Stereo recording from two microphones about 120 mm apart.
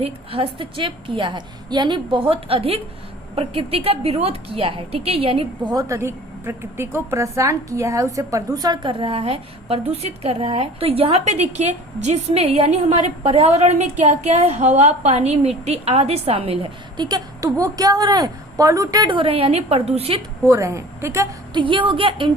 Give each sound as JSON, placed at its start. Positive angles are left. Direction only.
{"t": 0.0, "sound": "a woman's voice", "side_deg": -50}
{"t": 5.6, "sound": "a woman's voice", "side_deg": -30}
{"t": 17.0, "sound": "a woman's voice", "side_deg": -35}
{"t": 20.5, "sound": "a woman's voice", "side_deg": -25}
{"t": 21.5, "sound": "a woman's voice", "side_deg": -45}